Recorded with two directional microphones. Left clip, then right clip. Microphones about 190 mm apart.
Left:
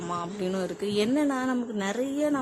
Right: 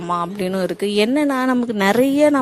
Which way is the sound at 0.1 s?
40° right (ahead or behind).